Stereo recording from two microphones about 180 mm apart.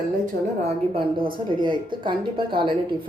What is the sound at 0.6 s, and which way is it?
A woman's voice, 35° right (ahead or behind).